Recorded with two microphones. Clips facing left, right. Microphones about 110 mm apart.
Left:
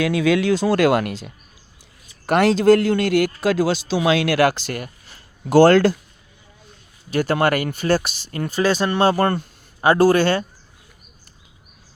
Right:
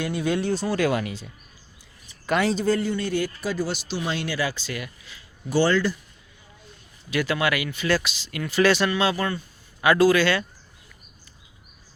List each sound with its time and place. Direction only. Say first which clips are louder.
0.1 s a man's voice: left 7 dB; 90° left
4.7 s speech: left 4 dB; 50° left (ahead or behind)
5.5 s a man's voice: left 9 dB; 90° left
7.1 s speech: left 5 dB; 45° left (ahead or behind)
9.8 s speech: left 3 dB; 35° left (ahead or behind)
10.2 s speech: left 4 dB; 50° left (ahead or behind)